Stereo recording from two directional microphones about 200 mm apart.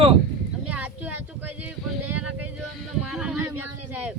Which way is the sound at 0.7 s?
5° right (ahead or behind).